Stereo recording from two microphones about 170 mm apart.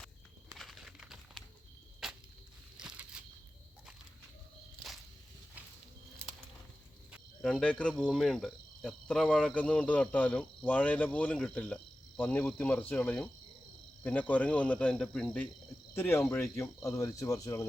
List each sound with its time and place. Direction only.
0.5 s bird: centre (ahead or behind)
2.0 s a sound: 5° right (ahead or behind)
7.1 s cricket: 5° left (ahead or behind)
16.6 s speech: 20° left (ahead or behind)